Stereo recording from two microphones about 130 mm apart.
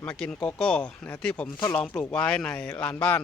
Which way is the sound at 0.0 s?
10° left (ahead or behind).